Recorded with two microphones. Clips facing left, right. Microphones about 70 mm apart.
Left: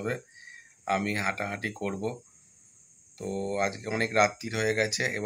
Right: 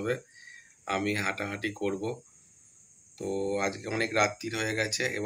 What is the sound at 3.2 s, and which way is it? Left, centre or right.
Speech, left.